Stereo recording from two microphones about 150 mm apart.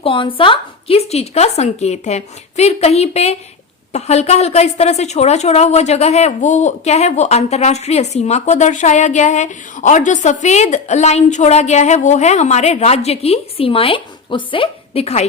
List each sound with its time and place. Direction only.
0.0 s a woman's voice: 35° left (ahead or behind)